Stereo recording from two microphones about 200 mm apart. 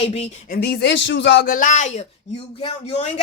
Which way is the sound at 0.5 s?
55° left (ahead or behind).